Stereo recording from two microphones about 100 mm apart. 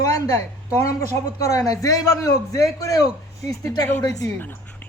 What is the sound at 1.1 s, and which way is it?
A man's voice, 30° left (ahead or behind).